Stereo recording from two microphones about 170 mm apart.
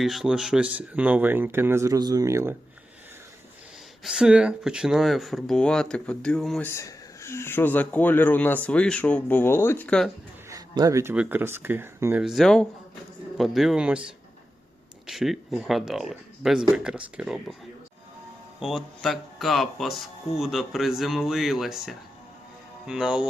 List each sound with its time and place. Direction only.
0.0 s speech: centre (ahead or behind)
4.0 s speech: 5° right (ahead or behind)
6.7 s speech: 15° left (ahead or behind)
10.5 s a sound: 20° right (ahead or behind)
11.1 s speech: 10° right (ahead or behind)
12.2 s speech: centre (ahead or behind)
15.0 s speech: centre (ahead or behind)
18.6 s speech: centre (ahead or behind)